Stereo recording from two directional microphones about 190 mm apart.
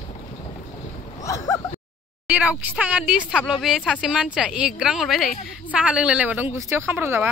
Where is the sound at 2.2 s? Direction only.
5° right (ahead or behind).